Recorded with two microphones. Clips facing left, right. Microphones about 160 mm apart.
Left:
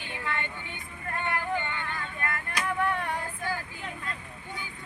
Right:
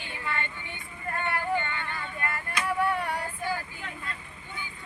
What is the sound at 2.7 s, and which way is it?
Female singing, 5° right (ahead or behind).